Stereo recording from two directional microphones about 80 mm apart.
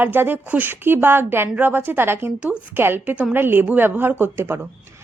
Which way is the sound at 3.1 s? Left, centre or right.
Centre.